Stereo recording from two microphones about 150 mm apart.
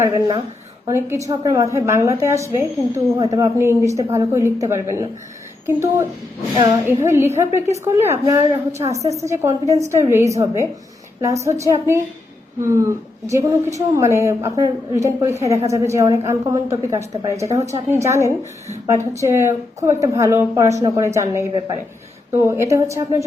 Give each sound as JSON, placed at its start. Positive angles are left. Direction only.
{"t": 0.0, "sound": "a woman's voice", "side_deg": -20}